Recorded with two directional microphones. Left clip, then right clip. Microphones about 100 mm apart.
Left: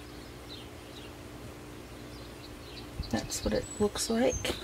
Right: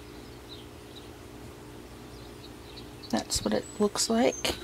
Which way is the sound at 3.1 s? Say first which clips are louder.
Right 3 dB; 45° right (ahead or behind).